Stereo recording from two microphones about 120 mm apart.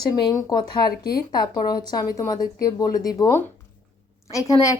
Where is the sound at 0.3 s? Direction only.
30° left (ahead or behind).